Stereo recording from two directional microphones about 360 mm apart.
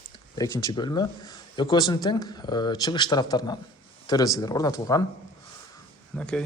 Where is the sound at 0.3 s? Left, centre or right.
Centre.